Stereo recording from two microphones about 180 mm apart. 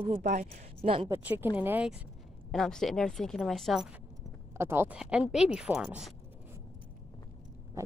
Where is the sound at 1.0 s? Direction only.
10° right (ahead or behind).